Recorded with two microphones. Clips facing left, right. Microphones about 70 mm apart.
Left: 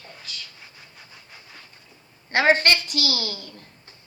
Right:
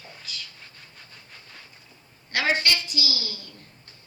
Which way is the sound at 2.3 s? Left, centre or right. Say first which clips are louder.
Left 6 dB; left.